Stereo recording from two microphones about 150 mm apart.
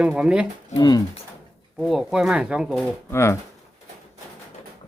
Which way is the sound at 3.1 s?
15° left (ahead or behind).